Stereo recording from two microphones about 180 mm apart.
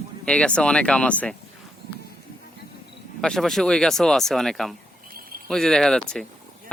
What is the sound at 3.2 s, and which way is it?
A man's voice, centre (ahead or behind).